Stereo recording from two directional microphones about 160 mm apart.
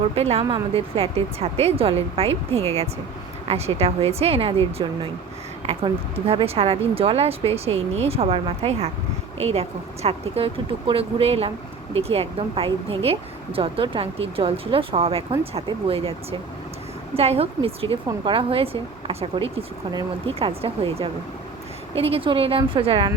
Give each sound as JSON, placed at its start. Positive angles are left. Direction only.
{"t": 0.2, "sound": "speech", "side_deg": -40}
{"t": 17.2, "sound": "speech", "side_deg": -40}